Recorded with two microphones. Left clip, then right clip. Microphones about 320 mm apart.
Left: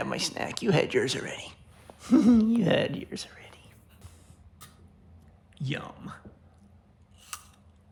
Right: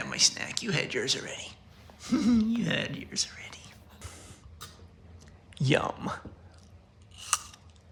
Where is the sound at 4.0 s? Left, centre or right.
Centre.